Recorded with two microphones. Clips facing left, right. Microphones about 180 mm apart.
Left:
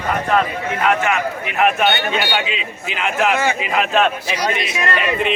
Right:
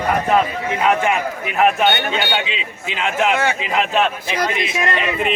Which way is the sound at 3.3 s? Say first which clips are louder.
Even; 10° left (ahead or behind).